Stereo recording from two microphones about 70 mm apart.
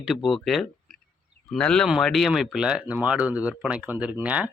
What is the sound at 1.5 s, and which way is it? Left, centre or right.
A man's voice, centre.